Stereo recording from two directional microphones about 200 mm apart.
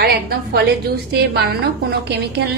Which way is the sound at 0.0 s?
50° right (ahead or behind).